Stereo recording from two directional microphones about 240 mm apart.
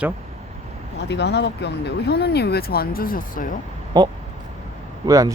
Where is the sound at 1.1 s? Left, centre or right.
Left.